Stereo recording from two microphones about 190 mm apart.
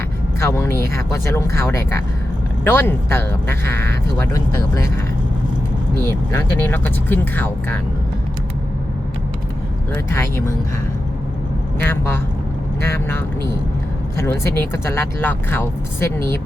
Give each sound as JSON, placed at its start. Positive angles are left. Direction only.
{"t": 0.3, "sound": "speech", "side_deg": 15}
{"t": 2.6, "sound": "speech", "side_deg": 10}
{"t": 6.1, "sound": "speech", "side_deg": 10}
{"t": 9.9, "sound": "speech", "side_deg": 15}
{"t": 11.8, "sound": "speech", "side_deg": 10}